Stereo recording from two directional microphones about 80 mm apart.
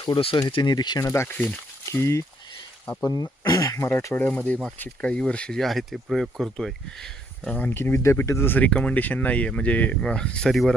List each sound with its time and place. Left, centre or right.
0.0 s speech: left
1.0 s speech: left
3.8 s speech: left
4.4 s speech: centre
7.5 s speech: left; by 10.8 s centre